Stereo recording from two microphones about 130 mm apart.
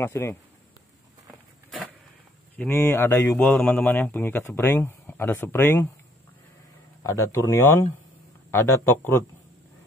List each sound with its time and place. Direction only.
0.0 s speech: 20° left (ahead or behind)
2.5 s speech: 15° left (ahead or behind)
7.0 s speech: 20° left (ahead or behind)